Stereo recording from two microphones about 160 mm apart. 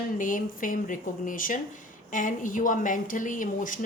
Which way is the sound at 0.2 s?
55° left (ahead or behind).